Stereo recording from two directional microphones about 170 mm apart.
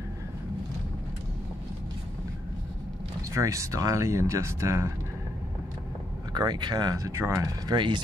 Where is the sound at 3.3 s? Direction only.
20° right (ahead or behind).